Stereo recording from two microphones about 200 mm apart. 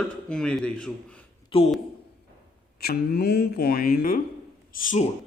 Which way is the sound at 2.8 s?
50° left (ahead or behind).